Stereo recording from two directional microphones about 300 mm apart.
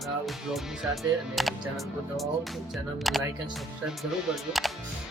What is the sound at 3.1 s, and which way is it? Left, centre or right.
Speech, centre.